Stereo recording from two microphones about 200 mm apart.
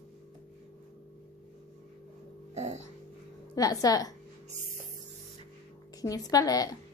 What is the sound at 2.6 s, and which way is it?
Music, 35° right (ahead or behind).